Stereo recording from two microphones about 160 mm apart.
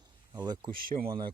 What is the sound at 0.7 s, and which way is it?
Speech, 60° right (ahead or behind).